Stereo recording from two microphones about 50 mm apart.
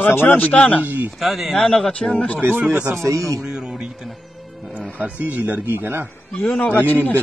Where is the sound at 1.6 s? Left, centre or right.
Centre.